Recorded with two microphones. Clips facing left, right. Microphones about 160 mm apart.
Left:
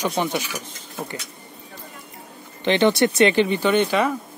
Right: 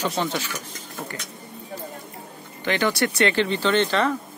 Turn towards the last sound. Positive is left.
turn(degrees=10)  # may be behind; listen again after turning